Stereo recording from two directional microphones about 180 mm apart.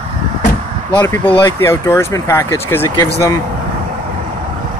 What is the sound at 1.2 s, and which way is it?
Speech, 30° left (ahead or behind).